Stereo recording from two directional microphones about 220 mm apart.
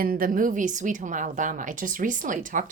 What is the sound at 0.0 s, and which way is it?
A woman's voice, 40° right (ahead or behind).